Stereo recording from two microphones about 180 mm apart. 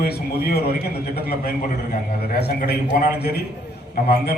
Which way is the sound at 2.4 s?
60° left (ahead or behind).